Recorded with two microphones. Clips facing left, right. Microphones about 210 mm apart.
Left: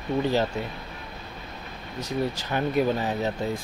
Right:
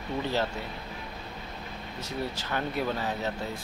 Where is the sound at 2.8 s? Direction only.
15° left (ahead or behind).